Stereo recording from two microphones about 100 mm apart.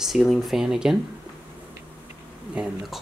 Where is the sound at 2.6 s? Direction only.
10° right (ahead or behind).